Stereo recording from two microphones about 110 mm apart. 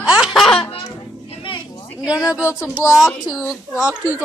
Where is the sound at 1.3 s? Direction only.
55° left (ahead or behind).